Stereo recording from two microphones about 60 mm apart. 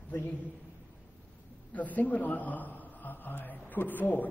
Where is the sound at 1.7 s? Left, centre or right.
Left.